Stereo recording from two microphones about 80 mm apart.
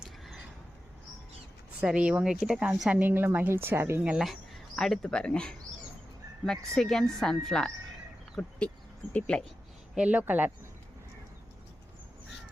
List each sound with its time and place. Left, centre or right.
1.8 s speech: centre
2.3 s speech: centre
2.9 s speech: right
4.2 s cricket: centre
5.0 s speech: centre
9.9 s speech: centre